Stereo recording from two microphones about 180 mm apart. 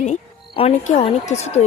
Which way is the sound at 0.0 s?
35° left (ahead or behind).